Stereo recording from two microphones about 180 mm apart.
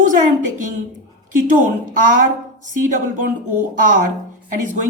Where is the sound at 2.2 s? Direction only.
45° right (ahead or behind).